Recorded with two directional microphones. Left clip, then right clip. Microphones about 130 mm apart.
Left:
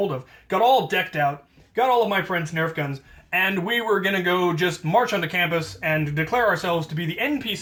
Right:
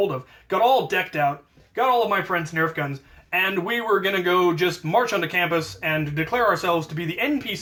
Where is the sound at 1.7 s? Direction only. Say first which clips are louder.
Even; 25° right (ahead or behind).